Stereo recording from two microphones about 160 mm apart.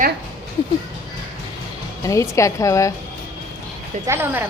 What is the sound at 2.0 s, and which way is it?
Speech, 20° left (ahead or behind).